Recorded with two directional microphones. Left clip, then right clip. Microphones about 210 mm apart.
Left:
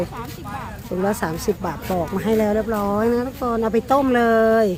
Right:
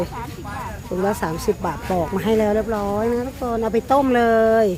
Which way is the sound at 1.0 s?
Centre (ahead or behind).